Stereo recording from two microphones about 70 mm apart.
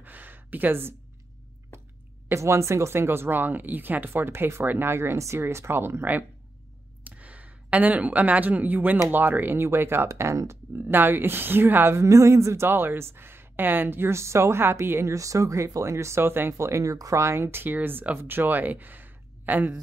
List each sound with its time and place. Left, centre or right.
0.0 s a sound: right
2.2 s speech: right
10.0 s speech: right
10.9 s speech: right
15.1 s speech: right